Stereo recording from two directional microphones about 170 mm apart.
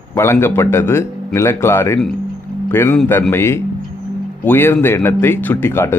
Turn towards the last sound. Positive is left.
turn(degrees=15)  # may be behind; listen again after turning